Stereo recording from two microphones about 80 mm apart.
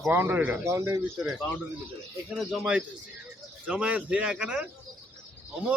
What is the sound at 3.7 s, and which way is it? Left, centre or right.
Speech, centre.